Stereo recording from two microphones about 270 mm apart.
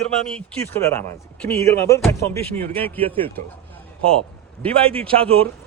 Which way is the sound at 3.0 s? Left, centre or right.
Centre.